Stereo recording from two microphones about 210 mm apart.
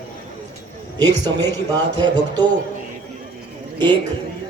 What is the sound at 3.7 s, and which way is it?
Speech, 20° right (ahead or behind).